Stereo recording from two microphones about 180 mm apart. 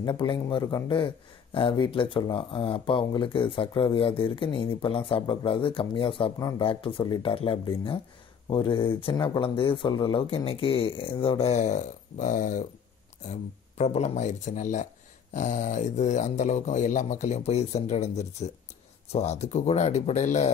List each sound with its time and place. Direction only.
0.0 s speech: 25° left (ahead or behind)